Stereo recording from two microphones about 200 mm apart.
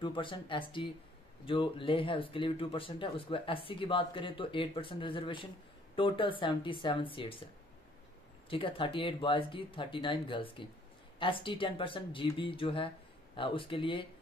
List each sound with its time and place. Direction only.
0.0 s speech: 25° left (ahead or behind)
8.5 s speech: 25° left (ahead or behind)